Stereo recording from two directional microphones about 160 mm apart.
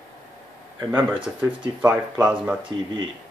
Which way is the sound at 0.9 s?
10° right (ahead or behind).